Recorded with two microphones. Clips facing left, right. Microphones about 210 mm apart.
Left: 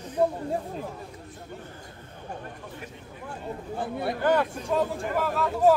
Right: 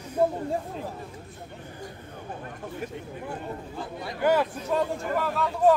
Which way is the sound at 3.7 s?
55° left (ahead or behind).